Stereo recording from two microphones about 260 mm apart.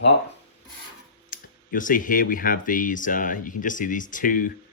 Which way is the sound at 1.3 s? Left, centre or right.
Left.